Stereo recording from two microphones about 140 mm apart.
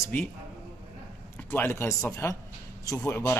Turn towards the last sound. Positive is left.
turn(degrees=15)  # may be behind; listen again after turning